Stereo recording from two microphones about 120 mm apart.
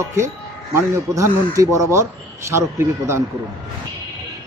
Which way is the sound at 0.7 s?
25° right (ahead or behind).